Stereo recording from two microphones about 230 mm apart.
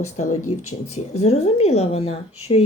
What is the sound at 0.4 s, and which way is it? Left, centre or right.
Speech, left.